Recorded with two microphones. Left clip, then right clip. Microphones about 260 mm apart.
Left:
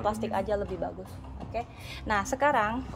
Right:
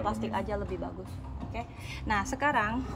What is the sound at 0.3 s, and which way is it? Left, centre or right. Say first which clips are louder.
A woman's voice: left 4 dB; left.